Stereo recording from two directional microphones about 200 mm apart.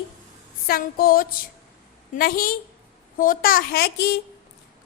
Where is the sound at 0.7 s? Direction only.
45° left (ahead or behind).